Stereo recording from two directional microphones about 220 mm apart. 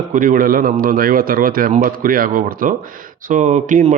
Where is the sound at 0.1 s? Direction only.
40° right (ahead or behind).